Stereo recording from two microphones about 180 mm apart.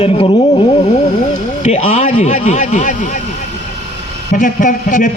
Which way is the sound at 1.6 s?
40° left (ahead or behind).